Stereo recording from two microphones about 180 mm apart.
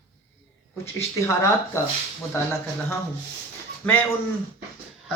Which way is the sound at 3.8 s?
10° left (ahead or behind).